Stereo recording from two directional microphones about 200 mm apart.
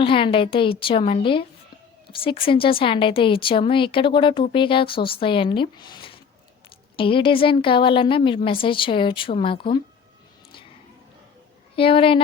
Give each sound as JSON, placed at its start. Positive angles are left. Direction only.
{"t": 0.0, "sound": "speech", "side_deg": 25}
{"t": 11.8, "sound": "speech", "side_deg": 25}